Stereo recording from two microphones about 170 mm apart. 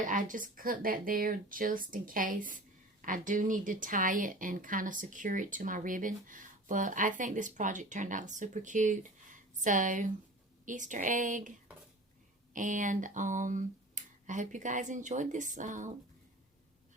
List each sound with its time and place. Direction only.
0.0 s a woman's voice: 50° right (ahead or behind)
12.5 s a woman's voice: 50° right (ahead or behind)